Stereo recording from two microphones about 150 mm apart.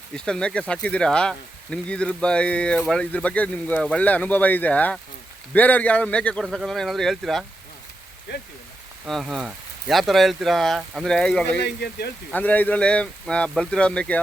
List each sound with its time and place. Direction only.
0.3 s speech: 5° left (ahead or behind)
9.0 s speech: centre (ahead or behind)
11.8 s speech: 90° left
12.3 s speech: 10° left (ahead or behind)